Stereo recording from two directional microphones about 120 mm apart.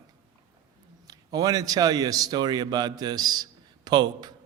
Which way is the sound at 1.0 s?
30° right (ahead or behind).